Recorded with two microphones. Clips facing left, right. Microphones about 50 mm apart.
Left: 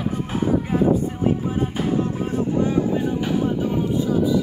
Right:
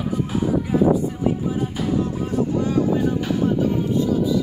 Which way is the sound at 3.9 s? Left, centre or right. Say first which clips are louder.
Left 2 dB; centre.